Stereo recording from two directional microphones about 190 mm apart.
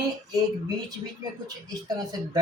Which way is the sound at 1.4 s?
20° right (ahead or behind).